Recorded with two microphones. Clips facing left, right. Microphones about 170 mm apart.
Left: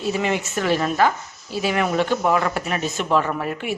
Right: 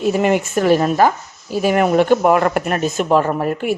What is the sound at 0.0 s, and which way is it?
Speech, 50° right (ahead or behind).